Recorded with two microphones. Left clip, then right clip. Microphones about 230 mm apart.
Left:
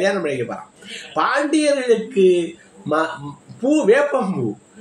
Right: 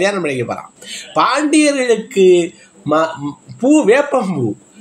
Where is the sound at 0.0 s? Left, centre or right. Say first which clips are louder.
Right 3 dB; right.